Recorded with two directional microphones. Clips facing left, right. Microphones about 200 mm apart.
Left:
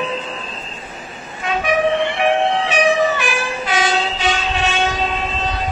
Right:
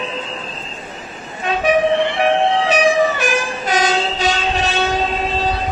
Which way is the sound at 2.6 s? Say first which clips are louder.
Right 1 dB; 40° right (ahead or behind).